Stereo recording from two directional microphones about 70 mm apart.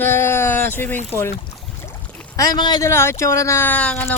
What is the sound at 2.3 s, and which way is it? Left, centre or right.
Speech, left.